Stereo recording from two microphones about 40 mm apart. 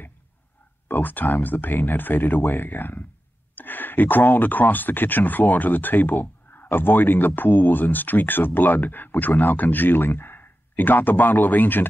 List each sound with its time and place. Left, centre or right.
0.8 s speech: left